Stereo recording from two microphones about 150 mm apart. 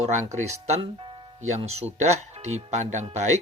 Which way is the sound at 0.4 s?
45° right (ahead or behind).